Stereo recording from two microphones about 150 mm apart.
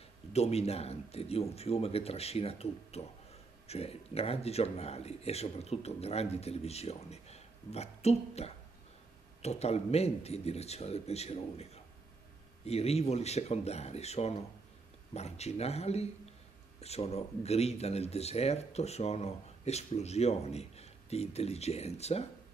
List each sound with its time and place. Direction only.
0.3 s speech: 45° left (ahead or behind)